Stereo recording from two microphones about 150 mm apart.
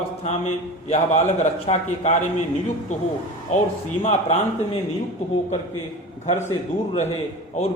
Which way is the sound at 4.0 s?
45° left (ahead or behind).